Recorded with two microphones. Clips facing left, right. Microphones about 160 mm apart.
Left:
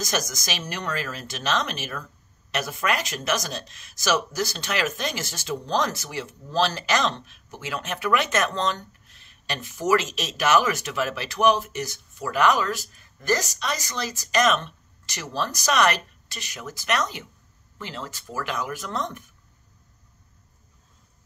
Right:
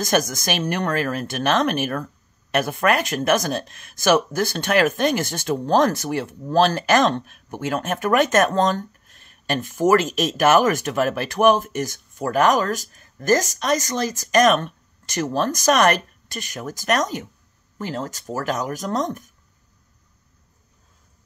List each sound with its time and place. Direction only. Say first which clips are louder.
0.0 s speech: right 8 dB; 55° right (ahead or behind)